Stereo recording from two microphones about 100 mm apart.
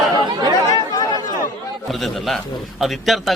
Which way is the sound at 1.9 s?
Centre (ahead or behind).